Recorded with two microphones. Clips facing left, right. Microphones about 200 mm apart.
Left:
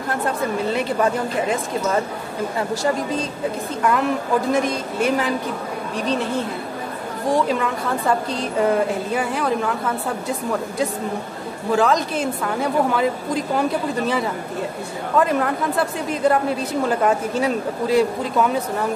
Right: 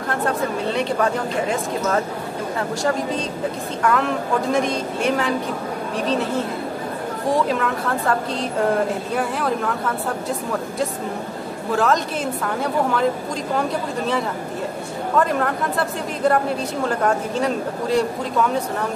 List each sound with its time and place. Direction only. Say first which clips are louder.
4.5 s a woman's voice: even; centre (ahead or behind)
7.3 s a woman's voice: left 1 dB; centre (ahead or behind)
11.7 s a woman's voice: left 2 dB; centre (ahead or behind)
15.1 s a woman's voice: left 1 dB; centre (ahead or behind)